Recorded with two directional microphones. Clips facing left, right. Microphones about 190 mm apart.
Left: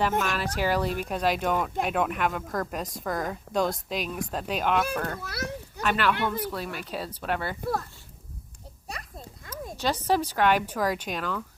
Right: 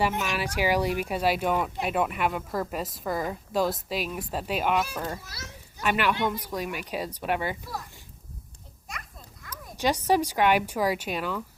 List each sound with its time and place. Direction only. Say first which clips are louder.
0.2 s a woman's voice: even; 10° right (ahead or behind)
5.2 s children playing: left 11 dB; 60° left (ahead or behind)
5.8 s speech: even; 10° right (ahead or behind)
7.6 s speech: left 8 dB; 55° left (ahead or behind)
8.9 s a sound: left 3 dB; 30° left (ahead or behind)
9.7 s speech: right 2 dB; 10° right (ahead or behind)